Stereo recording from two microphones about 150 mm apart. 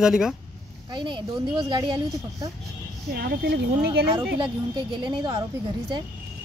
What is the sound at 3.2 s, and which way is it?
Speech, 90° right.